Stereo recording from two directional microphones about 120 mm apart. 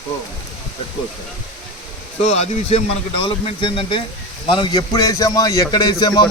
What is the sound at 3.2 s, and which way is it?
A man's voice, 45° left (ahead or behind).